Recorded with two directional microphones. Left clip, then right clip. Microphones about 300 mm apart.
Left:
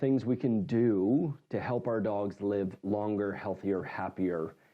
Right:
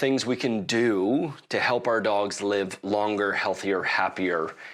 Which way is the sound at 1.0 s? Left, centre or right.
Right.